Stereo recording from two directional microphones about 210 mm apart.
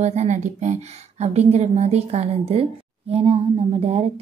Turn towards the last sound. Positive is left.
turn(degrees=-30)  # may be behind; listen again after turning